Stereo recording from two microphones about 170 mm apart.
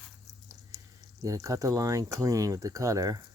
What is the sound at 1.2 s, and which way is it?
Speech, 20° right (ahead or behind).